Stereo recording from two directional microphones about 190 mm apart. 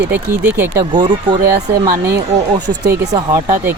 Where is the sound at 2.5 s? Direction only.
20° right (ahead or behind).